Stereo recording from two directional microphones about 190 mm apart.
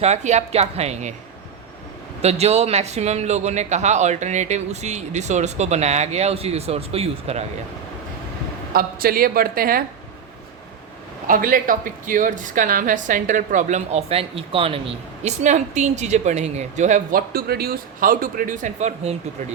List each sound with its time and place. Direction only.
0.0 s a man's voice: 35° right (ahead or behind)
2.2 s a man's voice: 35° right (ahead or behind)
8.7 s a woman's voice: 50° right (ahead or behind)
11.3 s a woman's voice: 50° right (ahead or behind)